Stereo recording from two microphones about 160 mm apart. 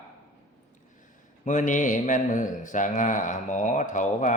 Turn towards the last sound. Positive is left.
turn(degrees=50)  # may be behind; listen again after turning